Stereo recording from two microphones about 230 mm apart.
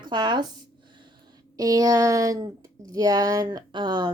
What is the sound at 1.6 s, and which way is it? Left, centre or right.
Speech, centre.